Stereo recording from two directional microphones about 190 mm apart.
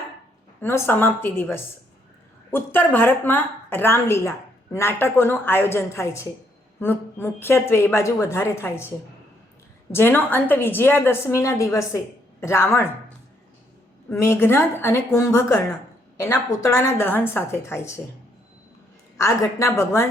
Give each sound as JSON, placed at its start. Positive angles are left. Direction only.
{"t": 0.6, "sound": "a woman's voice", "side_deg": 10}
{"t": 9.9, "sound": "a woman's voice", "side_deg": 10}
{"t": 14.1, "sound": "a woman's voice", "side_deg": 15}
{"t": 19.1, "sound": "a woman's voice", "side_deg": 15}